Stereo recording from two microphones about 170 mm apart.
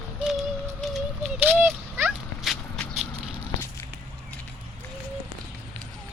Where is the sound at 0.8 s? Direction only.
5° right (ahead or behind).